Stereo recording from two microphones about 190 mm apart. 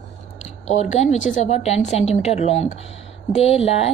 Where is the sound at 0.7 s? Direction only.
40° left (ahead or behind).